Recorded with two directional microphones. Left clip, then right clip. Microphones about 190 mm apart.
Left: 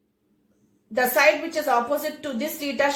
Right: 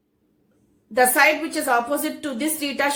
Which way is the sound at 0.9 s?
30° right (ahead or behind).